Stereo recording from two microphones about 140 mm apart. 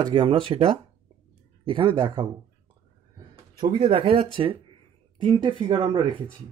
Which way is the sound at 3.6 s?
40° right (ahead or behind).